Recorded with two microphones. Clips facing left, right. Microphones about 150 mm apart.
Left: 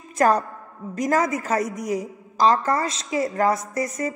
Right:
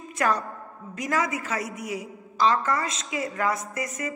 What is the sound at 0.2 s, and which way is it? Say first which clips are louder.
A woman's voice: left 6 dB; 40° left (ahead or behind).